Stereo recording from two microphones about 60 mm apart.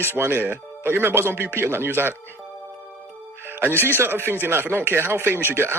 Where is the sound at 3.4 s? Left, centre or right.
Right.